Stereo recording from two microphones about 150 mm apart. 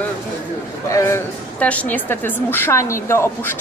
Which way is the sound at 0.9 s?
20° left (ahead or behind).